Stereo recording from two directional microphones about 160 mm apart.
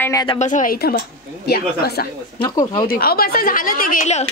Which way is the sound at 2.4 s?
25° left (ahead or behind).